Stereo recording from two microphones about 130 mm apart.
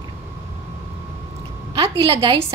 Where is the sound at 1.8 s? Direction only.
45° right (ahead or behind).